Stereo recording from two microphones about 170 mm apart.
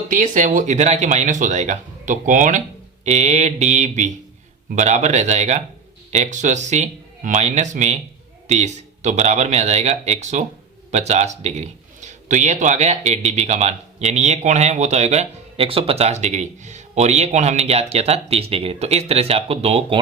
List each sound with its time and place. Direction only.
0.1 s a man's voice: 50° right (ahead or behind)